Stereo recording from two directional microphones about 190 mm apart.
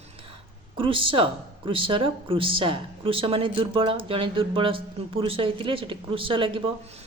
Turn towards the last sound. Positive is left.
turn(degrees=-25)  # may be behind; listen again after turning